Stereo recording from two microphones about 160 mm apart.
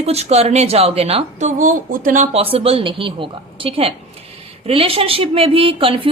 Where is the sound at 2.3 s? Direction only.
35° right (ahead or behind).